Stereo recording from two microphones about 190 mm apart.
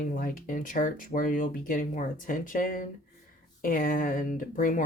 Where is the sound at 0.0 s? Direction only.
45° left (ahead or behind).